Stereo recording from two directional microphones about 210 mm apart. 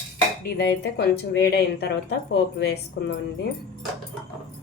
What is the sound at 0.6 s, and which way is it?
Speech, 55° left (ahead or behind).